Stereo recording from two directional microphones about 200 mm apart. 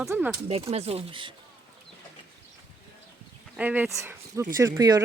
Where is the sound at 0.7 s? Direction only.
30° right (ahead or behind).